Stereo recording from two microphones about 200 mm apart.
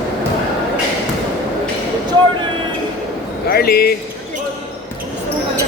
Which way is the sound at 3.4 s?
50° left (ahead or behind).